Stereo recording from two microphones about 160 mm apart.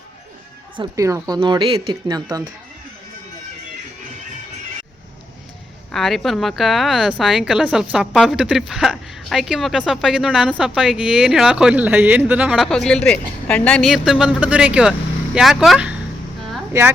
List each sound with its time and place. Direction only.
0.8 s speech: 20° right (ahead or behind)
5.9 s speech: centre (ahead or behind)
12.6 s speech: 5° left (ahead or behind)